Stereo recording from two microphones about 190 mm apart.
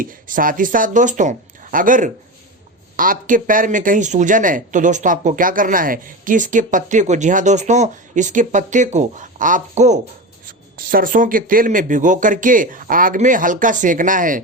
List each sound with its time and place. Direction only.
0.0 s speech: 45° right (ahead or behind)
10.4 s speech: 50° right (ahead or behind)